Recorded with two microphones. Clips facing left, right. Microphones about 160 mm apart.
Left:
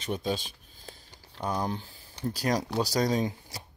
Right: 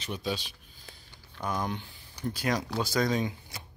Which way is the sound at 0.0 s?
45° left (ahead or behind).